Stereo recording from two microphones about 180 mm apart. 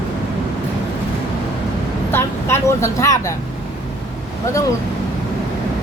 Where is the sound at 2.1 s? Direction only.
15° left (ahead or behind).